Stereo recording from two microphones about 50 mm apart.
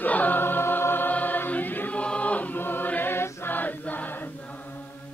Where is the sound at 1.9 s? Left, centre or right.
Left.